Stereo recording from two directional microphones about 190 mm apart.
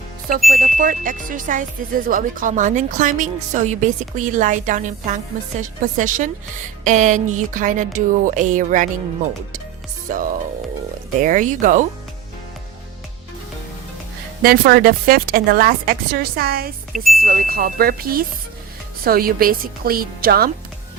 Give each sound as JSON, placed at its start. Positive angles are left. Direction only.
{"t": 0.3, "sound": "speech", "side_deg": -45}
{"t": 10.1, "sound": "speech", "side_deg": -45}
{"t": 14.4, "sound": "speech", "side_deg": -50}
{"t": 16.9, "sound": "speech", "side_deg": 0}
{"t": 17.2, "sound": "speech", "side_deg": -50}